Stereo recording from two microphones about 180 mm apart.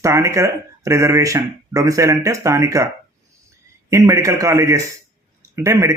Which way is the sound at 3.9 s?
15° right (ahead or behind).